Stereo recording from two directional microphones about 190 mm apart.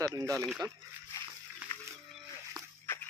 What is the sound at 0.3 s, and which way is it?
Speech, 5° left (ahead or behind).